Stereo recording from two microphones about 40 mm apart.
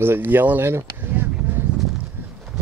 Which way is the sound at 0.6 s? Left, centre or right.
Right.